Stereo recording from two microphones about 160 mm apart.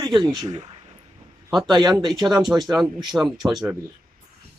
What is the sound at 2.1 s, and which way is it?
Speech, 30° right (ahead or behind).